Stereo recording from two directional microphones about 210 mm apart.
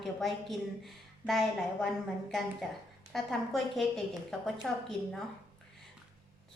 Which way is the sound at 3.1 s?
Centre (ahead or behind).